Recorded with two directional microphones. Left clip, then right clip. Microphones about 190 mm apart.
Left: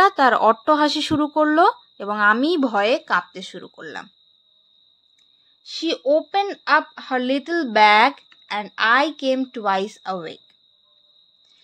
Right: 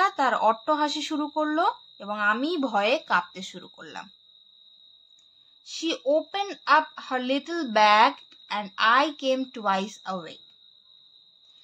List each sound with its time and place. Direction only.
0.0 s speech: 40° left (ahead or behind)
5.7 s a woman's voice: 25° left (ahead or behind)